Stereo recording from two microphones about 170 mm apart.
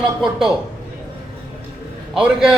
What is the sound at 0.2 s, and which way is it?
Speech, 5° right (ahead or behind).